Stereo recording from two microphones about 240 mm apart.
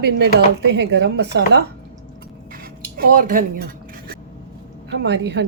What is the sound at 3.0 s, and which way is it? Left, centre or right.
Speech, right.